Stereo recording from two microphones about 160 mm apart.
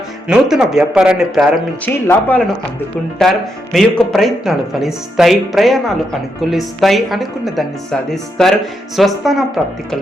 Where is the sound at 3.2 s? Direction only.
5° left (ahead or behind).